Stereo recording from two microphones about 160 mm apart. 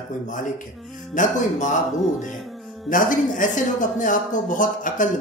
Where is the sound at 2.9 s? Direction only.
55° left (ahead or behind).